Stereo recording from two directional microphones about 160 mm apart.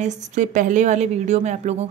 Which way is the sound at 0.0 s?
50° right (ahead or behind).